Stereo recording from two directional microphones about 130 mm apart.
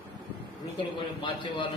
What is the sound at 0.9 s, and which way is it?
Speech, 40° left (ahead or behind).